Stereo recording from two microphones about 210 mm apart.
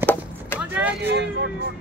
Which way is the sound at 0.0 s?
10° left (ahead or behind).